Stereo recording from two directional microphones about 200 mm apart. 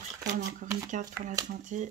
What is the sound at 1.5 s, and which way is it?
Speech, 40° right (ahead or behind).